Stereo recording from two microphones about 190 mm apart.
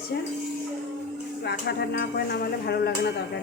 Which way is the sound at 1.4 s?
60° left (ahead or behind).